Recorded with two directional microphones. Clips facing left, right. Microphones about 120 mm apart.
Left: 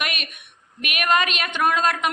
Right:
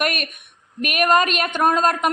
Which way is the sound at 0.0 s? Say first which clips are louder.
Right 6 dB; 45° right (ahead or behind).